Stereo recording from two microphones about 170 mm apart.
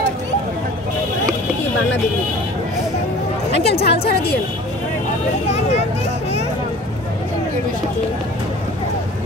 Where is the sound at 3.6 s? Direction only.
75° left (ahead or behind).